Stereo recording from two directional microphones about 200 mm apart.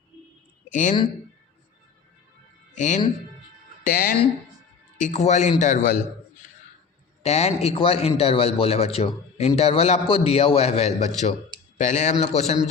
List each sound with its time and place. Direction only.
0.7 s speech: 40° left (ahead or behind)
2.7 s speech: 35° left (ahead or behind)
3.8 s a man's voice: 45° left (ahead or behind)
7.2 s a man's voice: 30° left (ahead or behind)